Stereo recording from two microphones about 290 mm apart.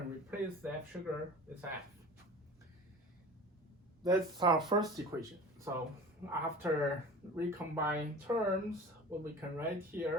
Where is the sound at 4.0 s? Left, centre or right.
Centre.